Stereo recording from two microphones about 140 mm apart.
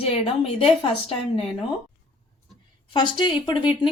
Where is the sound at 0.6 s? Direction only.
45° left (ahead or behind).